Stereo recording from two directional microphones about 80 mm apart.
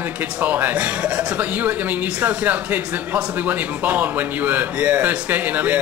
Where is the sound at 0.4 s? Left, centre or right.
Right.